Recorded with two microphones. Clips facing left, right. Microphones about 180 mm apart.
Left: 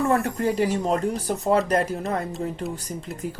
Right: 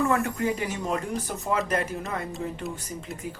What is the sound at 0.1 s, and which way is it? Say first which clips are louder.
Speech: left 3 dB; 35° left (ahead or behind).